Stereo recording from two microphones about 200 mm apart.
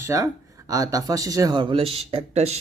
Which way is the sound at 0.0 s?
15° right (ahead or behind).